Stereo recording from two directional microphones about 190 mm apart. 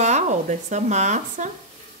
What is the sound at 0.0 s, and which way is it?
Speech, 40° right (ahead or behind).